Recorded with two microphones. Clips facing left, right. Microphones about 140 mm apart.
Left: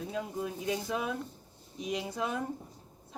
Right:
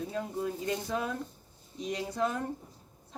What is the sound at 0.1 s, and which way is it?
Speech, 5° left (ahead or behind).